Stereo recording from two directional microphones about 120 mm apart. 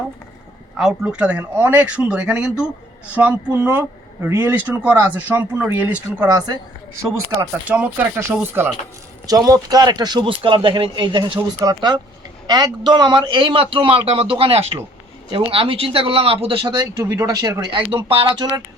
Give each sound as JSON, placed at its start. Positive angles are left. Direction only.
{"t": 0.8, "sound": "speech", "side_deg": -5}
{"t": 6.2, "sound": "a man's voice", "side_deg": -30}
{"t": 7.7, "sound": "speech", "side_deg": -10}
{"t": 9.2, "sound": "a man's voice", "side_deg": -30}
{"t": 16.8, "sound": "speech", "side_deg": -25}
{"t": 18.1, "sound": "a man's voice", "side_deg": -45}